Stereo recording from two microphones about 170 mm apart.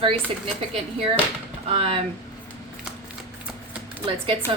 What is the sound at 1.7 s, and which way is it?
Speech, 35° right (ahead or behind).